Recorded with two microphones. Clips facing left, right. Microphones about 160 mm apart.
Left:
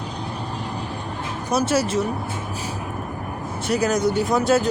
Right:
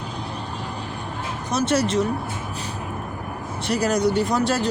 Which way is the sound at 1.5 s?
5° left (ahead or behind).